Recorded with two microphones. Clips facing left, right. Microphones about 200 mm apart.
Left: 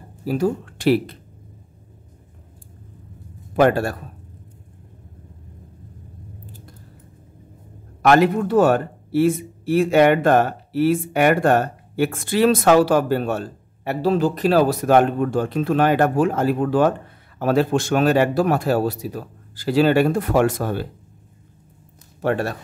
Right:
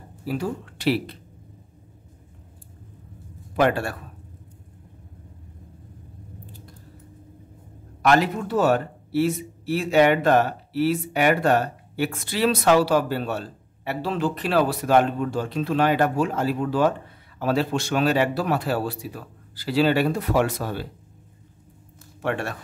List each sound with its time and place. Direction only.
0.2 s speech: 45° left (ahead or behind)
3.5 s a man's voice: 45° left (ahead or behind)
8.1 s a man's voice: 55° left (ahead or behind)
22.2 s a man's voice: 40° left (ahead or behind)